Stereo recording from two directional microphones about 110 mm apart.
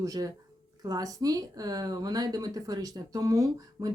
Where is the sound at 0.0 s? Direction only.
30° right (ahead or behind).